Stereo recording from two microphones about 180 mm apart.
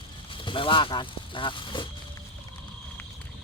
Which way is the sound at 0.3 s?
30° left (ahead or behind).